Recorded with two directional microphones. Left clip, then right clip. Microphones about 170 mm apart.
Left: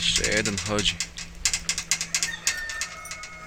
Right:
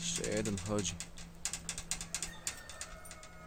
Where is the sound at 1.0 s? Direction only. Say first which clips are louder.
Left 16 dB; 70° right (ahead or behind).